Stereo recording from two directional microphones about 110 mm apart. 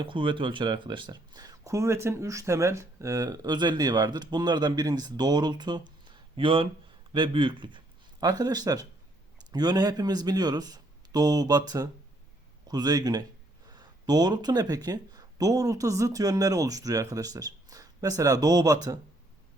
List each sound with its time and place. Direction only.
0.0 s a man's voice: 50° right (ahead or behind)
8.2 s speech: 35° right (ahead or behind)